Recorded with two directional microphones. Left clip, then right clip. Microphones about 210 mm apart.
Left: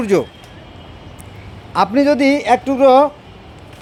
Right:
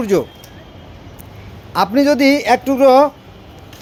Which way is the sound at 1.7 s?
Centre (ahead or behind).